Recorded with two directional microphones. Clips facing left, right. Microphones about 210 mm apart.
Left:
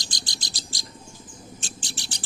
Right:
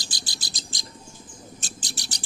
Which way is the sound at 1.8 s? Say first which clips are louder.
Even; 40° right (ahead or behind).